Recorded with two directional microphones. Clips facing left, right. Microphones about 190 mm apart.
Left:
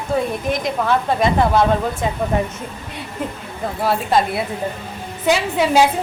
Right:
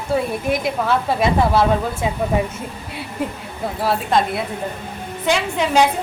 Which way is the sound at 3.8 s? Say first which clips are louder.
Left 1 dB; centre (ahead or behind).